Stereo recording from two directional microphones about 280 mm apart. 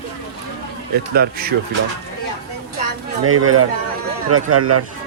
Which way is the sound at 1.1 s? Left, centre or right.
Right.